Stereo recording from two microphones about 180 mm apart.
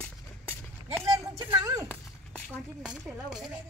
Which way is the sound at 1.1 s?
20° right (ahead or behind).